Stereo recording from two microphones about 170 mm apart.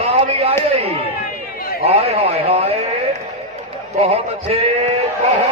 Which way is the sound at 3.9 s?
35° right (ahead or behind).